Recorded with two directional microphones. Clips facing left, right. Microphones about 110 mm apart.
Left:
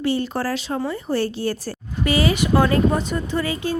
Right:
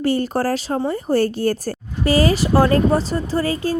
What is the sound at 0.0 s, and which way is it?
A woman's voice, 45° right (ahead or behind).